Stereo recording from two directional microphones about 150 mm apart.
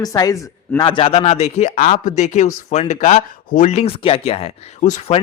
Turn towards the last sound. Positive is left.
turn(degrees=55)  # may be behind; listen again after turning